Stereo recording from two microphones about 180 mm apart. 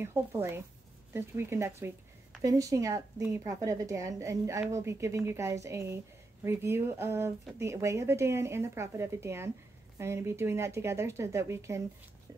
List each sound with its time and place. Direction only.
0.0 s a woman's voice: 15° right (ahead or behind)